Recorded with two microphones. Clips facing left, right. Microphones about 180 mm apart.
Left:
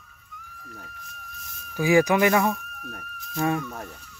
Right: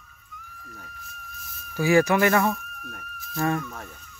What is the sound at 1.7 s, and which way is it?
Speech, 15° left (ahead or behind).